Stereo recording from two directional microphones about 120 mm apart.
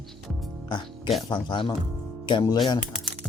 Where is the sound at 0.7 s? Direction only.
40° left (ahead or behind).